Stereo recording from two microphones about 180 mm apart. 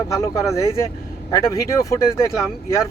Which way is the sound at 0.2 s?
15° left (ahead or behind).